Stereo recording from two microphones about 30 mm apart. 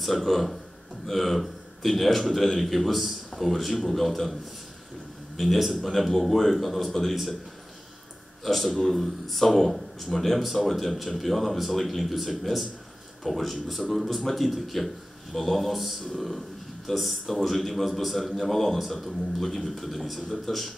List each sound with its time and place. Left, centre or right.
0.0 s a man's voice: centre
5.4 s a man's voice: centre
8.5 s a man's voice: centre
10.4 s a man's voice: centre
10.7 s a man's voice: centre